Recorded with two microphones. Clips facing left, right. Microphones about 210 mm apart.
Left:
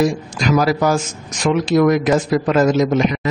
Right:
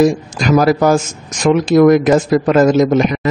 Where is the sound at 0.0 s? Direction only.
50° right (ahead or behind).